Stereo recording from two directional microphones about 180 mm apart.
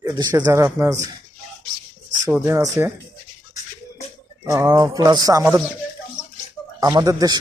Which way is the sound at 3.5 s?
40° left (ahead or behind).